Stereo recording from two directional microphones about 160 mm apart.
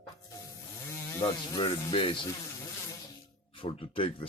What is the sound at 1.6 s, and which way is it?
Speech, 35° left (ahead or behind).